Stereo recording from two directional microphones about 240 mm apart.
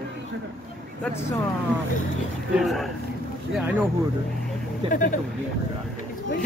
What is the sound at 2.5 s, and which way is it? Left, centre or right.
Speech, centre.